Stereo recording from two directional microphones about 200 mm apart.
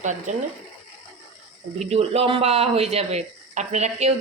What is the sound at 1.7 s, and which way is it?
Speech, 30° right (ahead or behind).